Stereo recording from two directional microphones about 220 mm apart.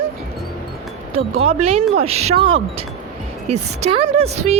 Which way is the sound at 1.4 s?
25° right (ahead or behind).